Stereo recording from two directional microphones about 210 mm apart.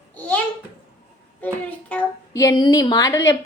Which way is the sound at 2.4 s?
15° left (ahead or behind).